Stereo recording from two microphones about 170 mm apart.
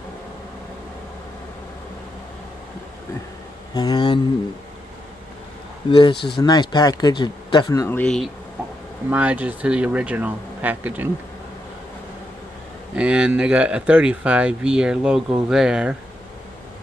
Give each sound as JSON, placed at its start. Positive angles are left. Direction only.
{"t": 3.7, "sound": "speech", "side_deg": 25}
{"t": 5.9, "sound": "speech", "side_deg": 30}
{"t": 8.0, "sound": "speech", "side_deg": 5}
{"t": 9.1, "sound": "speech", "side_deg": -10}
{"t": 12.9, "sound": "speech", "side_deg": -5}